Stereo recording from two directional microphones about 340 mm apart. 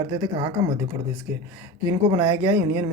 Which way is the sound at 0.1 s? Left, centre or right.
Centre.